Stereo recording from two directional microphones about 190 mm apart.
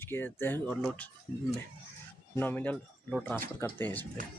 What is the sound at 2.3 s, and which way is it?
Speech, 10° left (ahead or behind).